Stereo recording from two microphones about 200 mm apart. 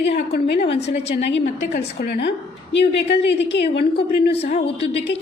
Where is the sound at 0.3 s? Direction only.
50° left (ahead or behind).